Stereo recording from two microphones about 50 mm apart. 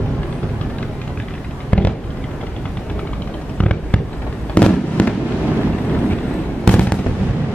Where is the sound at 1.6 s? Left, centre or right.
Left.